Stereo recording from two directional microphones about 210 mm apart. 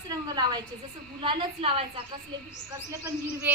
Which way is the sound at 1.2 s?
25° right (ahead or behind).